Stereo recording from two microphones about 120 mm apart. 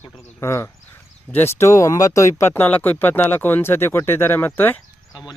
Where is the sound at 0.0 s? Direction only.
25° left (ahead or behind).